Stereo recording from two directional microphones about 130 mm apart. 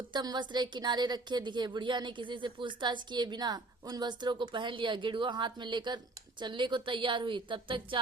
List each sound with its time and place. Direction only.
0.1 s a woman's voice: 35° right (ahead or behind)